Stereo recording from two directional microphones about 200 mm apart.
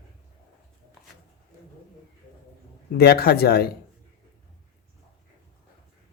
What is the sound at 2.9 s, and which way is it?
Speech, 50° left (ahead or behind).